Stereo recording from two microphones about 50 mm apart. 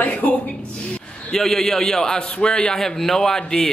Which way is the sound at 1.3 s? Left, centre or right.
Centre.